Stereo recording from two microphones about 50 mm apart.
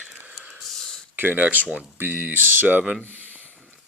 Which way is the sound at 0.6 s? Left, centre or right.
Centre.